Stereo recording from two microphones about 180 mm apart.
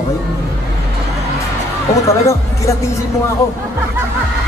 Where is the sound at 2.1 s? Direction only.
15° left (ahead or behind).